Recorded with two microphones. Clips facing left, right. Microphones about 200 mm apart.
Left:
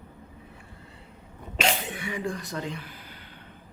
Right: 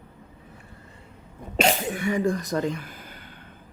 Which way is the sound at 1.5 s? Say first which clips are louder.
Right 5 dB; 40° right (ahead or behind).